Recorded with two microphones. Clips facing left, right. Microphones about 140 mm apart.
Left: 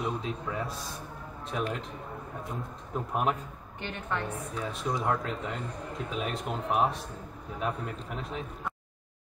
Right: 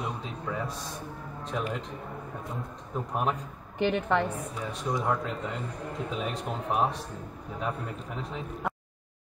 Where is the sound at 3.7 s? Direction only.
70° right (ahead or behind).